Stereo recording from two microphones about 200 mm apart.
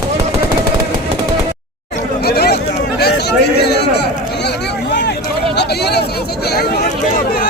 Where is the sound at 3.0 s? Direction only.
55° left (ahead or behind).